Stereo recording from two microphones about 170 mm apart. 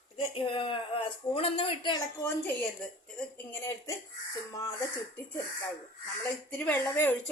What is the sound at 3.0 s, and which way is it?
A woman's voice, 10° left (ahead or behind).